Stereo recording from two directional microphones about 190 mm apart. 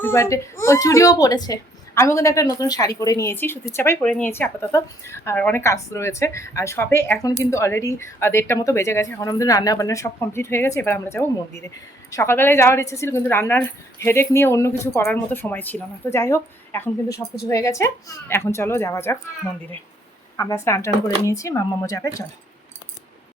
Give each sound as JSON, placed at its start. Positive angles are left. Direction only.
{"t": 0.0, "sound": "a woman's voice", "side_deg": 15}
{"t": 20.3, "sound": "a woman's voice", "side_deg": 15}